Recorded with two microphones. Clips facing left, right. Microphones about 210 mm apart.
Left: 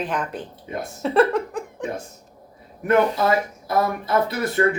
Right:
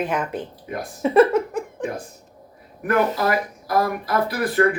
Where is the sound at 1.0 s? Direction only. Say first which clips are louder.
Right 3 dB; 5° right (ahead or behind).